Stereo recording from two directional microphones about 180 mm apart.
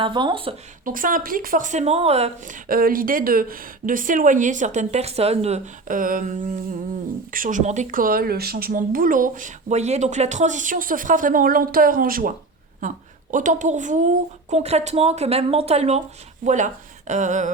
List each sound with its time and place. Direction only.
0.0 s speech: 25° right (ahead or behind)
0.9 s speech: 50° right (ahead or behind)
2.6 s speech: 55° right (ahead or behind)
13.3 s a woman's voice: 45° right (ahead or behind)